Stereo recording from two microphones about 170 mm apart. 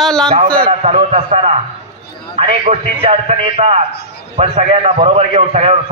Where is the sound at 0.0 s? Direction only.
5° left (ahead or behind).